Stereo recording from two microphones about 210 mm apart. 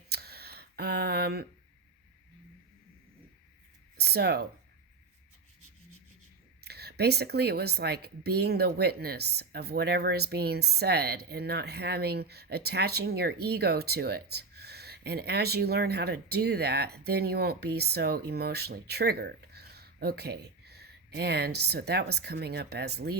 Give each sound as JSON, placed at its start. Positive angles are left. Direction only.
{"t": 0.1, "sound": "a sound", "side_deg": -50}
{"t": 3.9, "sound": "speech", "side_deg": -50}
{"t": 6.7, "sound": "speech", "side_deg": -50}